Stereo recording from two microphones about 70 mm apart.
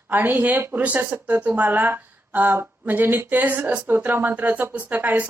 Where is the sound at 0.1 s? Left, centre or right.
Right.